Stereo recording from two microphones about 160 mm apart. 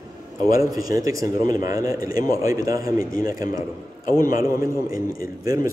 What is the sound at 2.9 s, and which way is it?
Speech, 60° left (ahead or behind).